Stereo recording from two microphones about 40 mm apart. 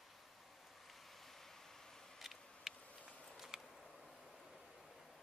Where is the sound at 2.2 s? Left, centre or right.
Centre.